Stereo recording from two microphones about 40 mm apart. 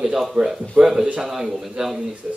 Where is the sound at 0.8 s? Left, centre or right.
Right.